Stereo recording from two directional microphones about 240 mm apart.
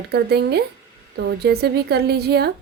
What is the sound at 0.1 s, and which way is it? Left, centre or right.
A woman's voice, right.